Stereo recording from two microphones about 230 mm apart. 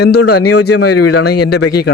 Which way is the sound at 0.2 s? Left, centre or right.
Left.